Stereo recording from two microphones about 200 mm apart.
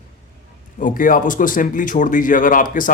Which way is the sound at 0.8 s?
40° left (ahead or behind).